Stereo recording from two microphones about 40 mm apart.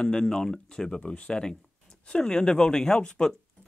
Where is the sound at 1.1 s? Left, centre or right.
Left.